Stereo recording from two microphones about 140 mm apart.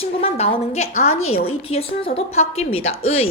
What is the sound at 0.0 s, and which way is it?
A woman's voice, 45° left (ahead or behind).